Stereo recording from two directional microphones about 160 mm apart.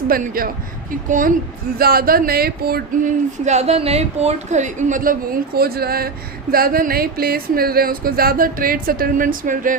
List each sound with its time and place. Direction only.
0.1 s speech: 65° right (ahead or behind)
1.8 s speech: 70° right (ahead or behind)
3.4 s a woman's voice: 45° right (ahead or behind)
5.5 s speech: 70° right (ahead or behind)